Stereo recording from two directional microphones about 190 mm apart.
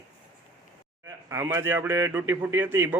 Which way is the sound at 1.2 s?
15° right (ahead or behind).